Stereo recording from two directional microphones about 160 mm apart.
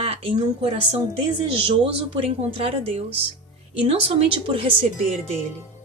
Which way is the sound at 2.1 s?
35° right (ahead or behind).